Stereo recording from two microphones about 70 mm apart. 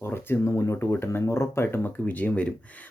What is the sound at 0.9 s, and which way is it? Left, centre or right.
Speech, left.